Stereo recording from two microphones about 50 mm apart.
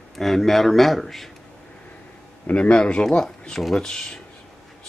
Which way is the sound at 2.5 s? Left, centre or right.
Left.